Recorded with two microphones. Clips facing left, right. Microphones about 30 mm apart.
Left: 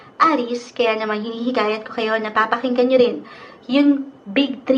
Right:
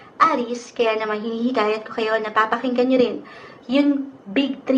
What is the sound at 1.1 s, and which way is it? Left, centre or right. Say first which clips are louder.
Speech: left 1 dB; left.